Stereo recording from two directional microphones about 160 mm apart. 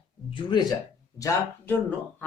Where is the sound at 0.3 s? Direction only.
30° left (ahead or behind).